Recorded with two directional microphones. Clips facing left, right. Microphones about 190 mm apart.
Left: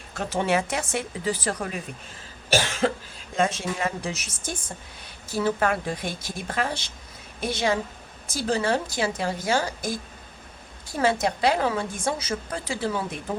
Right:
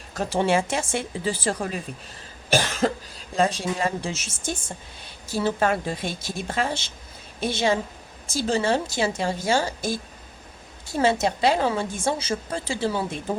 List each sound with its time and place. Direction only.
0.1 s a woman's voice: 35° right (ahead or behind)
2.6 s cough: 40° right (ahead or behind)
3.3 s a woman's voice: 35° right (ahead or behind)